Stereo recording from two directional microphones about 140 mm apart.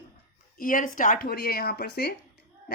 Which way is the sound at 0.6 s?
70° left (ahead or behind).